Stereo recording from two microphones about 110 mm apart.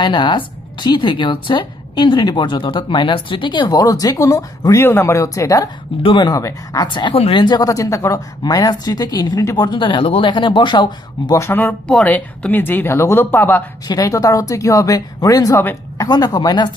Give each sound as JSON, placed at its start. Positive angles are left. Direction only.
{"t": 0.0, "sound": "a woman's voice", "side_deg": 40}
{"t": 4.8, "sound": "speech", "side_deg": 20}
{"t": 11.3, "sound": "speech", "side_deg": 20}
{"t": 13.8, "sound": "speech", "side_deg": 30}